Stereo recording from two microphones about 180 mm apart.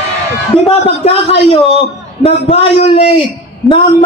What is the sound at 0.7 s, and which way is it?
A man's voice, 30° left (ahead or behind).